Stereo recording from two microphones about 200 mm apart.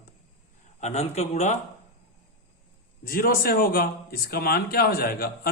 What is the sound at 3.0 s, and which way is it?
Speech, 45° left (ahead or behind).